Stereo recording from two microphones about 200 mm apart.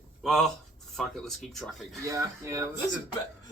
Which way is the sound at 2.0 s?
15° right (ahead or behind).